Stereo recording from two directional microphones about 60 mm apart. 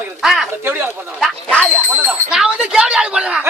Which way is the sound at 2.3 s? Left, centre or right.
Centre.